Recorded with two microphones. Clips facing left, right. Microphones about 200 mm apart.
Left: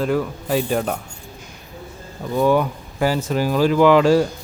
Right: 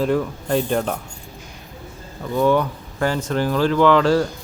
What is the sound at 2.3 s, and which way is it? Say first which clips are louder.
A man's voice: left 1 dB; 10° left (ahead or behind).